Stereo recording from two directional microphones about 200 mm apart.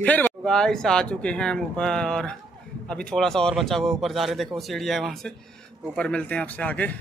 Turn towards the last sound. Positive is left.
turn(degrees=5)  # may be behind; listen again after turning